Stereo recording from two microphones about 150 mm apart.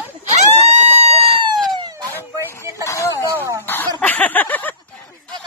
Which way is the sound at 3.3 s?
20° right (ahead or behind).